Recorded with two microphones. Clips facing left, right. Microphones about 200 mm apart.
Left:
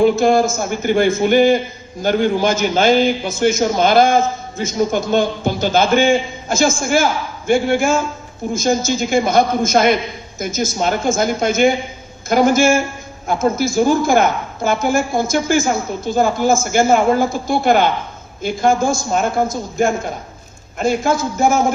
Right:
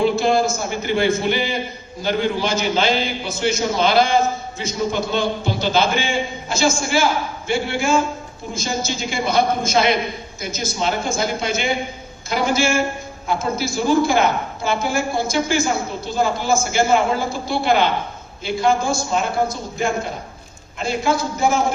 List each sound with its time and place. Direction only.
0.0 s a man's voice: 50° left (ahead or behind)